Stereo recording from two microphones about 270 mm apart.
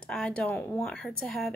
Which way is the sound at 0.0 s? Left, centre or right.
Centre.